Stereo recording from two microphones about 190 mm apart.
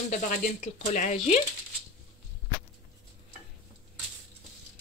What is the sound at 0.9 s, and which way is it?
Speech, 40° left (ahead or behind).